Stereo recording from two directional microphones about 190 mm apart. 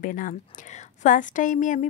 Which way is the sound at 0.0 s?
45° left (ahead or behind).